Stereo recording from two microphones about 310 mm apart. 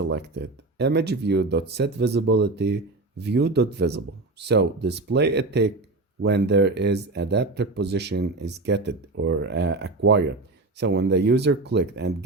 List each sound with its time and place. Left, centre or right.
0.1 s speech: right